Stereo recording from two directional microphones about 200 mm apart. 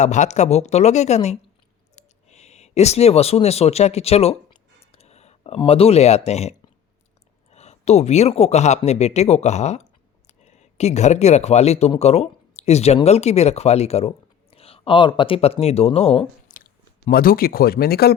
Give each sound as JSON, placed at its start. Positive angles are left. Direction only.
{"t": 0.0, "sound": "speech", "side_deg": 35}
{"t": 16.6, "sound": "speech", "side_deg": 50}